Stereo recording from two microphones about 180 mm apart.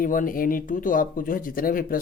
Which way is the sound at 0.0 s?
50° left (ahead or behind).